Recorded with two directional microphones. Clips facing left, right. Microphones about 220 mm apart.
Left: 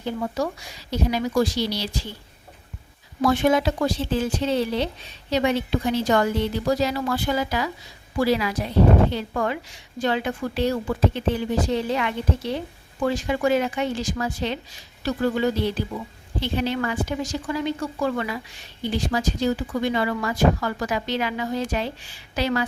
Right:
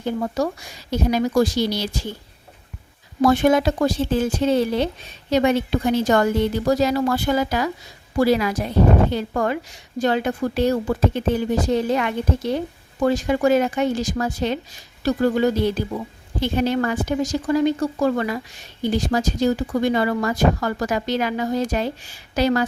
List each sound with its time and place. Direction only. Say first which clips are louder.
0.0 s speech: right 3 dB; 45° right (ahead or behind)
3.2 s speech: right 3 dB; 45° right (ahead or behind)